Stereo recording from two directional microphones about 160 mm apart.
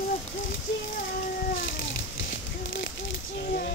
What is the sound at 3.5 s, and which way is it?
Female singing, 65° left (ahead or behind).